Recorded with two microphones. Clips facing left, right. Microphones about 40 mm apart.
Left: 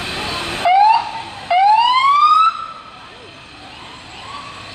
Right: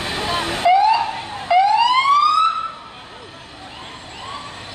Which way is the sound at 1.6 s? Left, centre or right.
Left.